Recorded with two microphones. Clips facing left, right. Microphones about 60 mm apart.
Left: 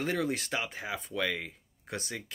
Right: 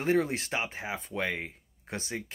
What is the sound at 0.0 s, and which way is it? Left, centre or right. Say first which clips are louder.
Speech: right 4 dB; right.